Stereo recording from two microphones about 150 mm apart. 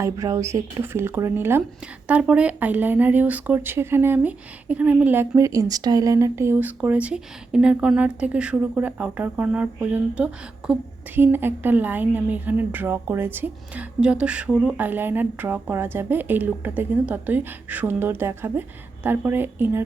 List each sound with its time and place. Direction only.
0.0 s speech: 20° right (ahead or behind)